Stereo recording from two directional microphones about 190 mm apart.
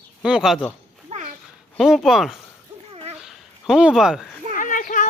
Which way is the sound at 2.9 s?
30° right (ahead or behind).